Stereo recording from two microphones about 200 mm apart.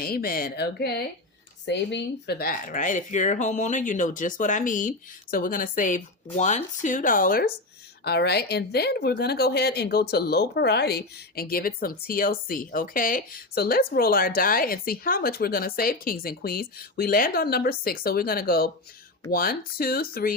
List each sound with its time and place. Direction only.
0.0 s a woman's voice: 50° left (ahead or behind)